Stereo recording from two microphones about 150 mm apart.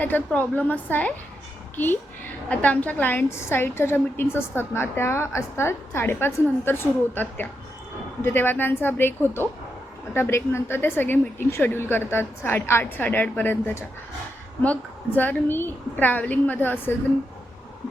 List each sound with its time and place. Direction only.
0.0 s a woman's voice: 10° left (ahead or behind)